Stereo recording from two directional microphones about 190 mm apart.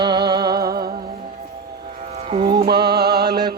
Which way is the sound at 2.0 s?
35° right (ahead or behind).